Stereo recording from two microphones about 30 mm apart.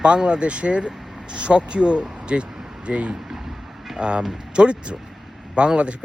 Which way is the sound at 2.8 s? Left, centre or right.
Right.